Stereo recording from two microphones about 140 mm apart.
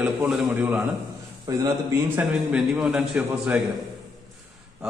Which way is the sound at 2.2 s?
10° right (ahead or behind).